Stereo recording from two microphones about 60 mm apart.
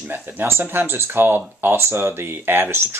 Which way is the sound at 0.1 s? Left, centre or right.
Right.